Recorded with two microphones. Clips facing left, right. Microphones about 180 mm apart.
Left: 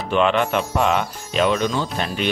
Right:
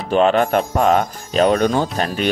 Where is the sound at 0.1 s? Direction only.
40° right (ahead or behind).